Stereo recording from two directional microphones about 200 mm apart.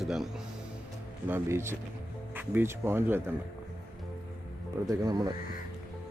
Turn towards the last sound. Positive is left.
turn(degrees=-20)  # may be behind; listen again after turning